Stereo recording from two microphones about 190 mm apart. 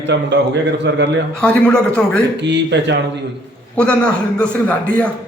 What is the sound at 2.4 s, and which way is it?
Speech, 65° right (ahead or behind).